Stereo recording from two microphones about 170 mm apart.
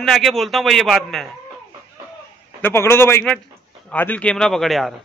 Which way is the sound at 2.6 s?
15° left (ahead or behind).